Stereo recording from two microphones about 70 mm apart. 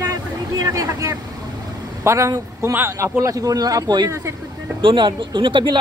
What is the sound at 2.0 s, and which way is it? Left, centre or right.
A woman's voice, right.